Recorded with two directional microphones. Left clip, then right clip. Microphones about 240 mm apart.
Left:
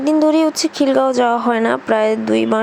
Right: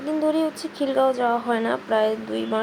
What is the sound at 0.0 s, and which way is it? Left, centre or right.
Speech, left.